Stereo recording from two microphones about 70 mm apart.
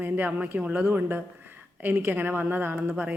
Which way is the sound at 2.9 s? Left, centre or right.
Centre.